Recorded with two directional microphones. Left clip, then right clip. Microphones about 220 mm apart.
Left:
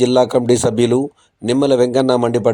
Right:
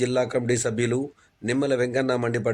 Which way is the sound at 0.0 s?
30° left (ahead or behind).